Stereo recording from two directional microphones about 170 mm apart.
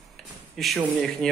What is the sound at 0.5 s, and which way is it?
Speech, centre (ahead or behind).